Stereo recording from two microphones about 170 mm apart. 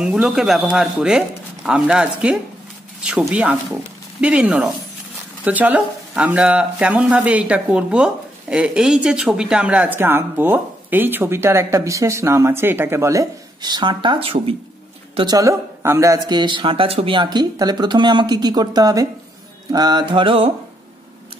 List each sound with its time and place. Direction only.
0.0 s a man's voice: 5° right (ahead or behind); by 20.5 s 30° right (ahead or behind)